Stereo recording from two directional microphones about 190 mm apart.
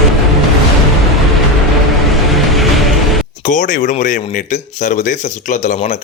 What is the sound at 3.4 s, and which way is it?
Speech, 40° left (ahead or behind).